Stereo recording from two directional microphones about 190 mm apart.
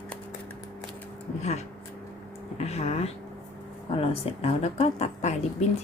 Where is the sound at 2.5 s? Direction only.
35° left (ahead or behind).